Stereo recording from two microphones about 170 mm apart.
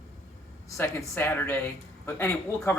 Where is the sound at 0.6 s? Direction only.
15° left (ahead or behind).